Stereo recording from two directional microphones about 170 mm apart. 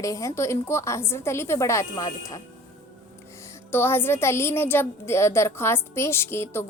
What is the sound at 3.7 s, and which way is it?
A woman's voice, 15° left (ahead or behind).